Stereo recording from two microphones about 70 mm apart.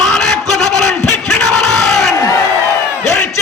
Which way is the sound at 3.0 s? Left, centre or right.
Left.